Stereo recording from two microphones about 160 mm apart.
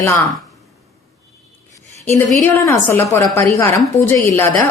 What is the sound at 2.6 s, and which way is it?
A woman's voice, 15° left (ahead or behind).